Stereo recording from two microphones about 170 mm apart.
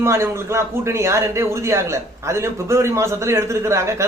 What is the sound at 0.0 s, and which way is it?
A man's voice, 15° right (ahead or behind).